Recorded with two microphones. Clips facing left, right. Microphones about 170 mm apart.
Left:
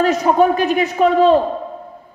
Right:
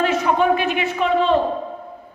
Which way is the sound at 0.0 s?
40° left (ahead or behind).